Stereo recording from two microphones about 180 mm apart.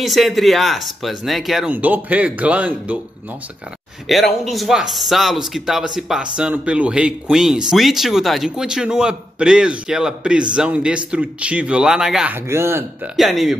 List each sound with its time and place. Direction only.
0.0 s speech: centre (ahead or behind)
4.1 s speech: centre (ahead or behind)
12.4 s speech: 15° right (ahead or behind)
13.1 s speech: centre (ahead or behind)